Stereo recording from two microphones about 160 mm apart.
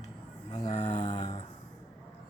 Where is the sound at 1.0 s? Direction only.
30° left (ahead or behind).